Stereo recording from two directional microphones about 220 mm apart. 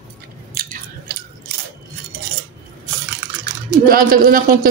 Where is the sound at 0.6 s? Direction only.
40° right (ahead or behind).